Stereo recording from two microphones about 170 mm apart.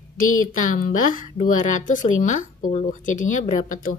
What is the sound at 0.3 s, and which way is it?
Speech, 50° left (ahead or behind).